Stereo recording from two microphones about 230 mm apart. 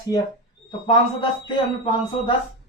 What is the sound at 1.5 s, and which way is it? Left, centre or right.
Speech, left.